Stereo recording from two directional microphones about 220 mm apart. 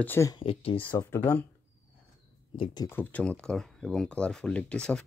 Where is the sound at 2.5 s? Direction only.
20° left (ahead or behind).